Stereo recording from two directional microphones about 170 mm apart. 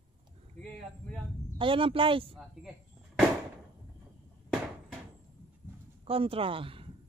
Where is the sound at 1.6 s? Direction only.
30° right (ahead or behind).